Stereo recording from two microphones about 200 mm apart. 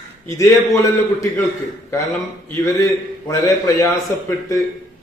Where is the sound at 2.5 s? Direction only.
15° left (ahead or behind).